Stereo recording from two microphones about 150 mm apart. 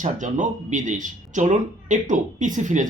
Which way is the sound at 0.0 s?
55° right (ahead or behind).